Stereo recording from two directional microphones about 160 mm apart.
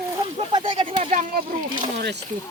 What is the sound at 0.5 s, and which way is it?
Speech, 30° right (ahead or behind).